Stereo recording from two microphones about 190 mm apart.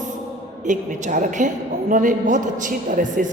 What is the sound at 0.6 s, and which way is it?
A woman's voice, 40° right (ahead or behind).